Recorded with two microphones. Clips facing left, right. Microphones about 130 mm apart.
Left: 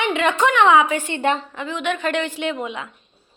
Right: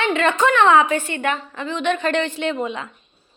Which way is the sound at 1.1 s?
30° left (ahead or behind).